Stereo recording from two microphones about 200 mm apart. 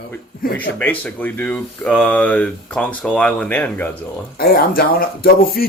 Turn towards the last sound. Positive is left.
turn(degrees=50)  # may be behind; listen again after turning